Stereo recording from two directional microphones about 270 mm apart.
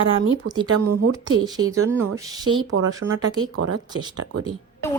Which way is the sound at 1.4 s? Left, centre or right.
Centre.